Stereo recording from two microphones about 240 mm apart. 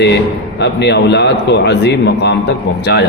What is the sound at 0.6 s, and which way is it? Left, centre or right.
A man's voice, left.